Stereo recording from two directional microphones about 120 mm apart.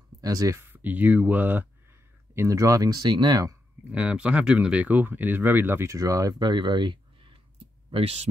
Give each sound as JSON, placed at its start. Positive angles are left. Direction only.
{"t": 0.2, "sound": "speech", "side_deg": -30}
{"t": 0.7, "sound": "speech", "side_deg": -15}
{"t": 2.3, "sound": "speech", "side_deg": -25}
{"t": 3.9, "sound": "speech", "side_deg": -10}
{"t": 7.5, "sound": "clicking", "side_deg": -55}